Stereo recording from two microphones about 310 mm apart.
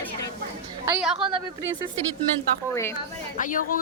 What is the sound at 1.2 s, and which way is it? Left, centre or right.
Speech, centre.